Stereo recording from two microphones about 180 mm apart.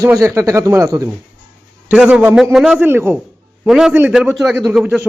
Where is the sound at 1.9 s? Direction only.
5° right (ahead or behind).